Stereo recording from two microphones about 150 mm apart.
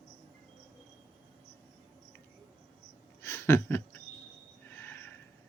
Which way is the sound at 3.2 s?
15° left (ahead or behind).